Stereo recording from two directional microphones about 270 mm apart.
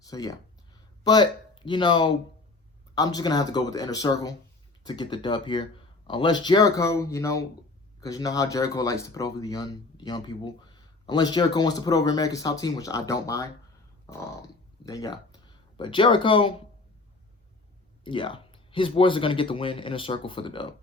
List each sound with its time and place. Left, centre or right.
0.1 s speech: centre
18.0 s speech: centre